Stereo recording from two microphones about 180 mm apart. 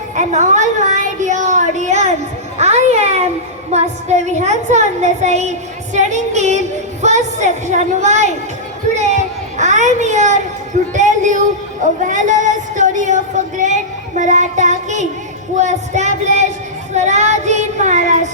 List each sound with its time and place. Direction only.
0.2 s a woman's voice: 40° right (ahead or behind)
9.6 s a woman's voice: 40° right (ahead or behind)